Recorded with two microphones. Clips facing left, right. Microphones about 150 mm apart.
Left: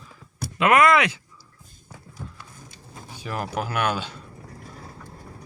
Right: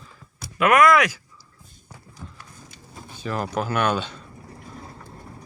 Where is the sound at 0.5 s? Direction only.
25° left (ahead or behind).